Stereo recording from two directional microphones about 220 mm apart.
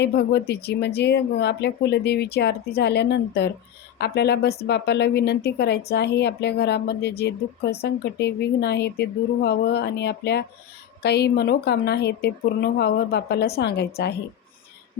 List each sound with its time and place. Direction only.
0.0 s speech: 50° left (ahead or behind)